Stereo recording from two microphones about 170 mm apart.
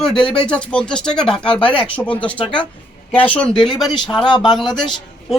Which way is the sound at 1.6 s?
30° left (ahead or behind).